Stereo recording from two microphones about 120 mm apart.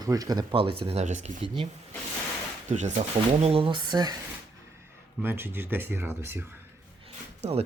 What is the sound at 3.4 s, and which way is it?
Speech, 50° right (ahead or behind).